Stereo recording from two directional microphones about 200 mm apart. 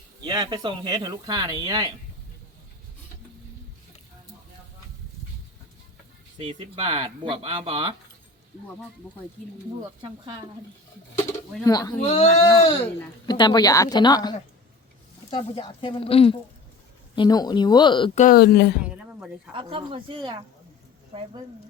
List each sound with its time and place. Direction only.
0.3 s speech: 20° right (ahead or behind)
6.5 s speech: 25° right (ahead or behind)
11.6 s speech: 20° left (ahead or behind)
11.9 s speech: 35° left (ahead or behind)
18.1 s speech: 40° left (ahead or behind)
18.8 s a sound: 5° right (ahead or behind)
19.5 s speech: 25° right (ahead or behind)